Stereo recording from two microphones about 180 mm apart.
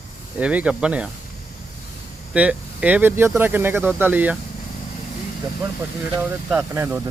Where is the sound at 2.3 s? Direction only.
5° right (ahead or behind).